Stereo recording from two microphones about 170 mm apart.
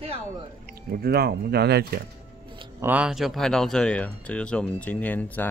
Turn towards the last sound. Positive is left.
turn(degrees=10)  # may be behind; listen again after turning